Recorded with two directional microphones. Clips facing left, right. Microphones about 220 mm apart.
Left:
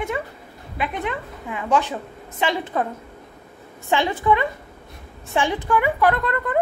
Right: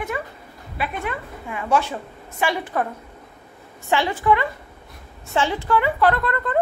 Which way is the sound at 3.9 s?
20° left (ahead or behind).